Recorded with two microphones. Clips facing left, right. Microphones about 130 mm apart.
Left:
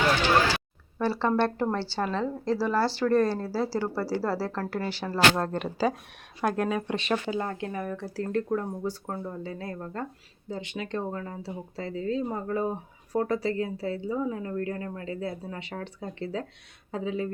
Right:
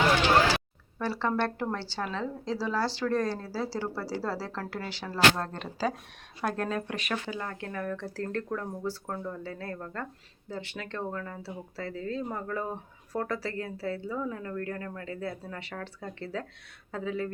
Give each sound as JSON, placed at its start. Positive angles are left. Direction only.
{"t": 0.9, "sound": "speech", "side_deg": 15}
{"t": 6.8, "sound": "speech", "side_deg": 25}